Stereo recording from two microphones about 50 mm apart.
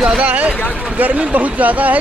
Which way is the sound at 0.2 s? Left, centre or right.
Right.